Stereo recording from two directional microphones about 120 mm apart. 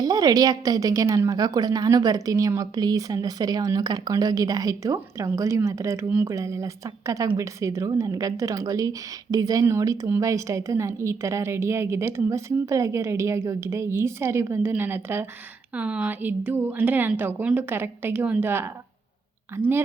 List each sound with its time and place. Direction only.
0.0 s a woman's voice: 30° right (ahead or behind)